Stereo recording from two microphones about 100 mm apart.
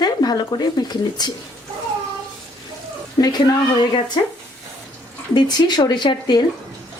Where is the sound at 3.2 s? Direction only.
45° left (ahead or behind).